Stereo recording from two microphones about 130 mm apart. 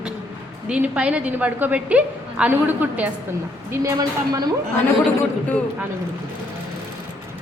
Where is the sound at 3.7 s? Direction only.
25° right (ahead or behind).